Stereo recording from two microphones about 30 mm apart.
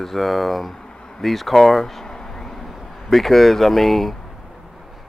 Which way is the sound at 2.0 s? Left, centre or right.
Centre.